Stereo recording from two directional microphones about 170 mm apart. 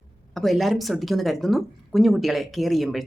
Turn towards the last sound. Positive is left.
turn(degrees=0)  # may be behind; listen again after turning